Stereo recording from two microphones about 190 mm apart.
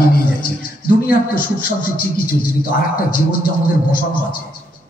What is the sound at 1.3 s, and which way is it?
Speech, 50° left (ahead or behind).